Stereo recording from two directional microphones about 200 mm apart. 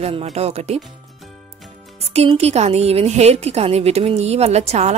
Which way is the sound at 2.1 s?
30° right (ahead or behind).